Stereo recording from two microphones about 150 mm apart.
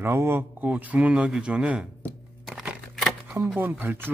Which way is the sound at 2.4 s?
5° right (ahead or behind).